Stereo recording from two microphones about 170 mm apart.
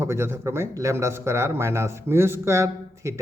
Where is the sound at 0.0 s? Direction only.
15° right (ahead or behind).